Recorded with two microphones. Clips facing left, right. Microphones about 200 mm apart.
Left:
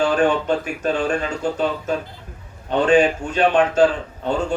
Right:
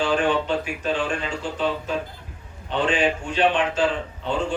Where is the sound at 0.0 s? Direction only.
45° left (ahead or behind).